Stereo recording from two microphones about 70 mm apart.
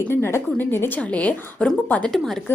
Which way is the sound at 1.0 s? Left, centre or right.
Centre.